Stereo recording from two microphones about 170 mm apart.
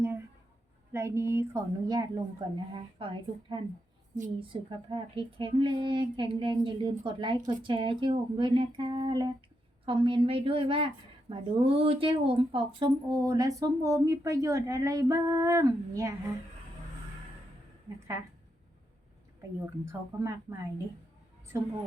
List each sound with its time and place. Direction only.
0.9 s a woman's voice: 15° right (ahead or behind)
2.7 s a woman's voice: 30° right (ahead or behind)
19.5 s a woman's voice: 15° right (ahead or behind)